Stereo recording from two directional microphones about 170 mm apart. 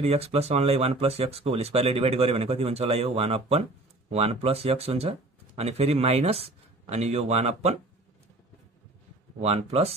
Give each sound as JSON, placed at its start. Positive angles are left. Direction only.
{"t": 0.0, "sound": "speech", "side_deg": -35}
{"t": 9.4, "sound": "speech", "side_deg": -35}